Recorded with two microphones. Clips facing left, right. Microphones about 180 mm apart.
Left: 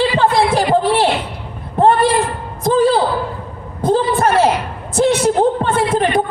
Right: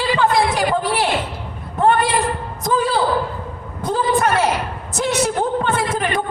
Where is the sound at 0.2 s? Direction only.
30° left (ahead or behind).